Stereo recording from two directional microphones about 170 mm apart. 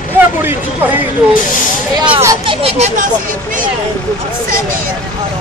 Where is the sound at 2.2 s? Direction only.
25° right (ahead or behind).